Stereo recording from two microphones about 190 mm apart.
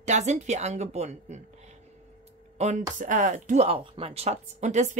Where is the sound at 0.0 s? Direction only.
35° right (ahead or behind).